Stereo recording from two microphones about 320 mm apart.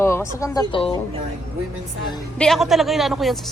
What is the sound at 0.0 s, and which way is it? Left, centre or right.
Speech, centre.